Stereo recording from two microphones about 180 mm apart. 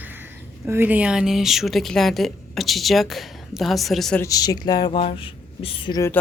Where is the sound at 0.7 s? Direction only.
10° right (ahead or behind).